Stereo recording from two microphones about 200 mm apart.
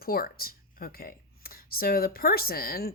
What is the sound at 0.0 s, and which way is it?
Speech, 50° left (ahead or behind).